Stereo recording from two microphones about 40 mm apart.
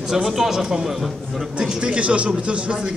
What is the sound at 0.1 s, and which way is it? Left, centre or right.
Speech, centre.